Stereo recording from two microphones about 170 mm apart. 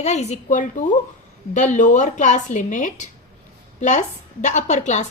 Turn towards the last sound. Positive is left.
turn(degrees=45)  # may be behind; listen again after turning